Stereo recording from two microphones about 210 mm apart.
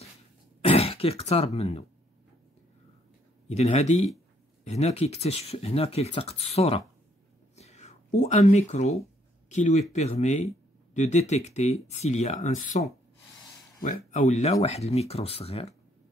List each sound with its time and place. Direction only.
0.6 s speech: 30° left (ahead or behind)
3.4 s speech: 30° left (ahead or behind)
7.5 s a sound: 30° left (ahead or behind)
9.5 s speech: 35° left (ahead or behind)